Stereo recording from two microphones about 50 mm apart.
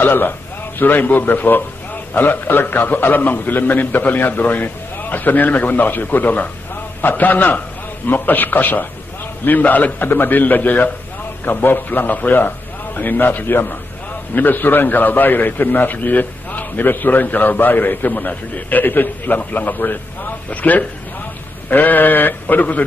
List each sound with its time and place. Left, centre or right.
0.0 s a man's voice: left